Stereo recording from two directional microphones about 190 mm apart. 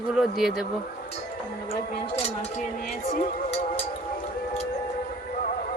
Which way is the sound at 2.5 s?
40° left (ahead or behind).